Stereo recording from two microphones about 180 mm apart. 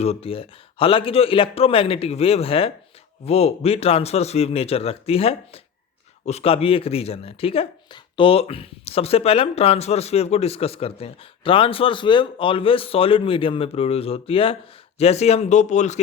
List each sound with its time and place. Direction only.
0.0 s speech: 35° left (ahead or behind)